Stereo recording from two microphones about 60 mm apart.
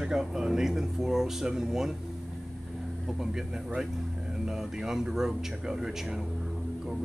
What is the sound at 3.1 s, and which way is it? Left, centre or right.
Speech, centre.